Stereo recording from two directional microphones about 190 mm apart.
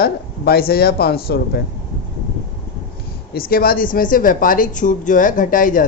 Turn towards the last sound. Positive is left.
turn(degrees=45)  # may be behind; listen again after turning